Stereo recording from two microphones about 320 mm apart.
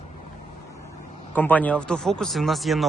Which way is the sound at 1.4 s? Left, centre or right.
Centre.